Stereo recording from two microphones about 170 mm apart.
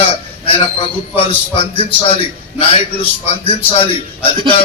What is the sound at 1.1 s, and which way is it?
A man's voice, 30° left (ahead or behind).